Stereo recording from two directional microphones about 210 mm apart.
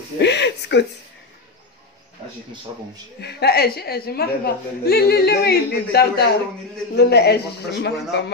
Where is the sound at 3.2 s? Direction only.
50° left (ahead or behind).